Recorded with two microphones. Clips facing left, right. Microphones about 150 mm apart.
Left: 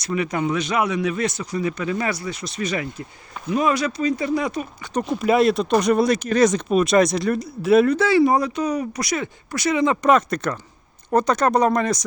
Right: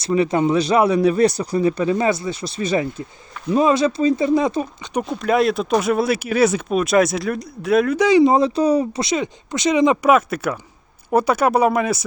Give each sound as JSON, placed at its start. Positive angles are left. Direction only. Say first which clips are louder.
{"t": 0.0, "sound": "speech", "louder": "right 6 dB", "side_deg": -30}
{"t": 5.0, "sound": "speech", "louder": "left 1 dB", "side_deg": 0}
{"t": 7.9, "sound": "speech", "louder": "right 3 dB", "side_deg": -15}
{"t": 10.1, "sound": "speech", "louder": "right 2 dB", "side_deg": -5}